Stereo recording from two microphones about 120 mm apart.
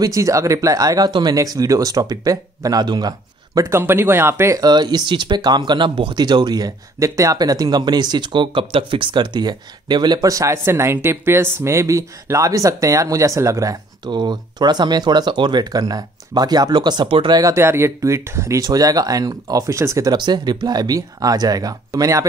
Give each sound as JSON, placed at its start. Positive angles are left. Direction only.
{"t": 0.0, "sound": "speech", "side_deg": -25}
{"t": 3.7, "sound": "speech", "side_deg": -20}
{"t": 4.6, "sound": "speech", "side_deg": -35}
{"t": 17.4, "sound": "speech", "side_deg": -25}